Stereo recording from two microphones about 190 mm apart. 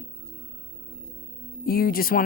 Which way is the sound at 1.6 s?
50° left (ahead or behind).